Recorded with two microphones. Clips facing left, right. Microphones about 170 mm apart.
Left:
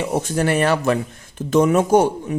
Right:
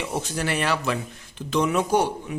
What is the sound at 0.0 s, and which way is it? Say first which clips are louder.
Speech: left 7 dB; 50° left (ahead or behind).